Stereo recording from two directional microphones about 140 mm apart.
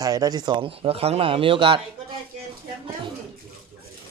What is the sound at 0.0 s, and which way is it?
Speech, 25° right (ahead or behind).